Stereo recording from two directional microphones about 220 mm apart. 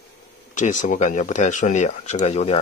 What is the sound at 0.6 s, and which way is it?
Speech, 35° left (ahead or behind).